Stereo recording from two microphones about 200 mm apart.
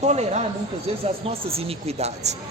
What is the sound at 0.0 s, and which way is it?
A man's voice, 35° right (ahead or behind).